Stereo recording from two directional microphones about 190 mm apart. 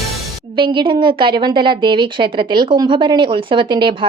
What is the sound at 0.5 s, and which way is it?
A woman's voice, 25° right (ahead or behind).